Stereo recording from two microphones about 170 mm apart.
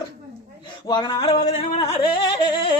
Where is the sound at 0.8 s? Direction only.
25° left (ahead or behind).